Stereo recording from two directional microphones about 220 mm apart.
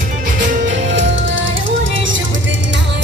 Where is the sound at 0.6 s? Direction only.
55° right (ahead or behind).